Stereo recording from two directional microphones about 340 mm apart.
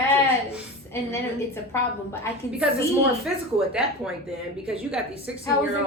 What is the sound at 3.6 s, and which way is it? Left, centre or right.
Speech, centre.